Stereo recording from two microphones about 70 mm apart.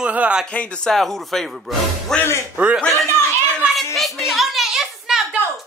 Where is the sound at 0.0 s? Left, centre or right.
Centre.